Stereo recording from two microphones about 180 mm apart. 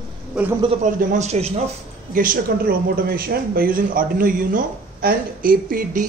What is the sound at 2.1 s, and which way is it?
Speech, 50° right (ahead or behind).